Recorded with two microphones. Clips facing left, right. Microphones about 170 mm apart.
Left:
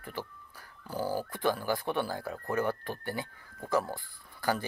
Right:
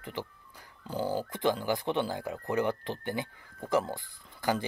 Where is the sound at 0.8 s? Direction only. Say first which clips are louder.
Right 1 dB; 20° right (ahead or behind).